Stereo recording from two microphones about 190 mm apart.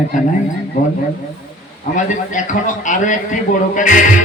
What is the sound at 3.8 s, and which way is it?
Music, 45° left (ahead or behind).